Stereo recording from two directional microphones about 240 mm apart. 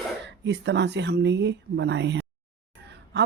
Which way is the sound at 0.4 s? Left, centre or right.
Right.